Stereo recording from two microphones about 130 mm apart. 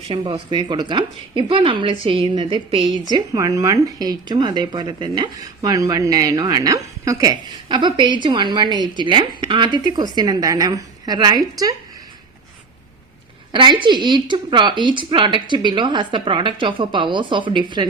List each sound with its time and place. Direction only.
0.1 s speech: 35° right (ahead or behind)
13.5 s speech: 40° right (ahead or behind)